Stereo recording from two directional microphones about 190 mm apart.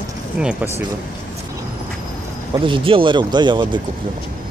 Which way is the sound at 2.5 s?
25° right (ahead or behind).